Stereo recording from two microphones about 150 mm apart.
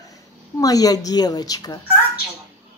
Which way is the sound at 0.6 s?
25° left (ahead or behind).